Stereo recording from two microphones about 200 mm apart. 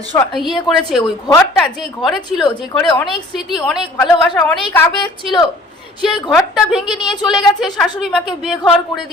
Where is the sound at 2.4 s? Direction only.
20° left (ahead or behind).